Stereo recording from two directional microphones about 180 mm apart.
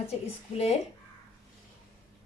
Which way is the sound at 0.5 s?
35° left (ahead or behind).